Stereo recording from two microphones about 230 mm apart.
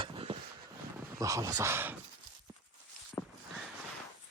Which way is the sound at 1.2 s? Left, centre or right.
Centre.